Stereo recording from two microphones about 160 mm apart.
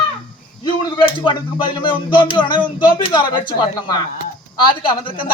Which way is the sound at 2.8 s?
30° left (ahead or behind).